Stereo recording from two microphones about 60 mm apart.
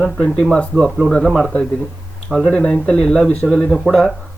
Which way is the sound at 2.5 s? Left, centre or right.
Centre.